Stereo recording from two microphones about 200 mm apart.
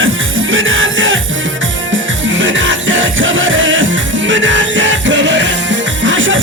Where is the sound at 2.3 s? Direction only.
70° right (ahead or behind).